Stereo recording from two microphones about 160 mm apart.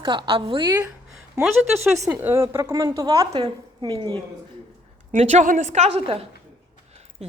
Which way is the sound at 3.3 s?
35° right (ahead or behind).